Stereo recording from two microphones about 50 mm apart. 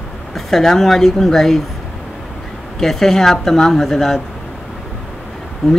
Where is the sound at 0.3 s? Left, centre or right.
Centre.